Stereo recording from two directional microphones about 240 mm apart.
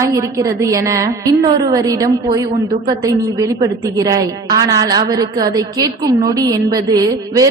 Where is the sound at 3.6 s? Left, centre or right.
Centre.